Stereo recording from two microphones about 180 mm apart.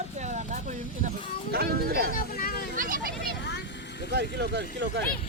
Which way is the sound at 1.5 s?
60° right (ahead or behind).